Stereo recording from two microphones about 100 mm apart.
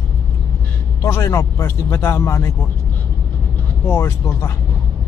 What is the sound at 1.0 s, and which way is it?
Speech, 35° left (ahead or behind).